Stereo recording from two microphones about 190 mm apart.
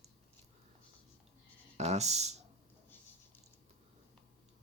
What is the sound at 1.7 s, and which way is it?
Speech, 35° right (ahead or behind).